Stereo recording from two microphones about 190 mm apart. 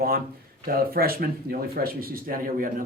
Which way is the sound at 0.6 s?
50° right (ahead or behind).